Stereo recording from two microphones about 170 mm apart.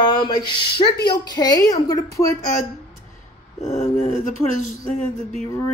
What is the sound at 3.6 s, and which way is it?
Speech, 40° left (ahead or behind).